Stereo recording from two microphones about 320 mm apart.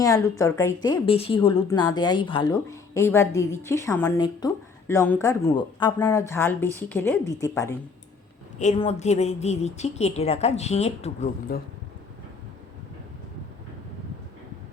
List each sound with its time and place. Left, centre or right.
0.0 s a woman's voice: centre
8.5 s a woman's voice: left